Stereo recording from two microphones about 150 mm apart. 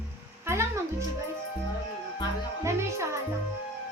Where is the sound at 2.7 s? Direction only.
20° right (ahead or behind).